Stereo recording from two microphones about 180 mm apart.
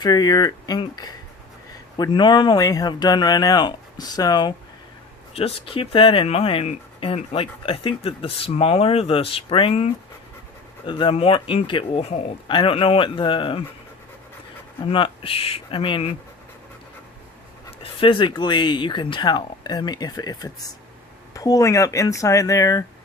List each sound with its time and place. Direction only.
0.0 s speech: 25° left (ahead or behind)
5.3 s speech: 35° left (ahead or behind)
14.8 s speech: 30° left (ahead or behind)
18.0 s speech: 30° left (ahead or behind)